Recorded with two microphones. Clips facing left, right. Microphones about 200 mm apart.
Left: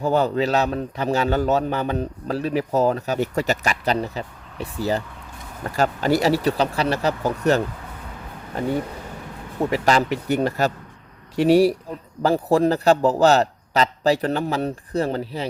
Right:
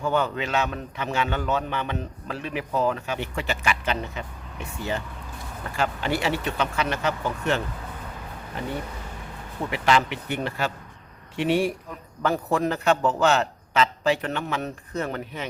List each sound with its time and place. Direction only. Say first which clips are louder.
0.0 s a man's voice: left 5 dB; 35° left (ahead or behind)